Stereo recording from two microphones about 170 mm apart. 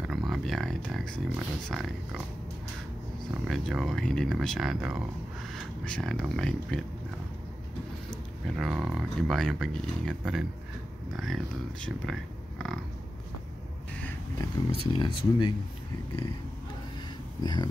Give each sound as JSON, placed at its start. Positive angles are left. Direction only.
{"t": 0.0, "sound": "speech", "side_deg": 0}
{"t": 3.4, "sound": "speech", "side_deg": 0}
{"t": 8.5, "sound": "speech", "side_deg": 0}
{"t": 14.7, "sound": "speech", "side_deg": 30}
{"t": 17.4, "sound": "speech", "side_deg": 25}